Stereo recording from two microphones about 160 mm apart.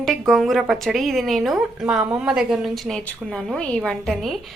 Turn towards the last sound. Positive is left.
turn(degrees=0)  # may be behind; listen again after turning